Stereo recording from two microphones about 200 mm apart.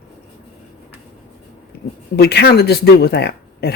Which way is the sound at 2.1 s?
50° left (ahead or behind).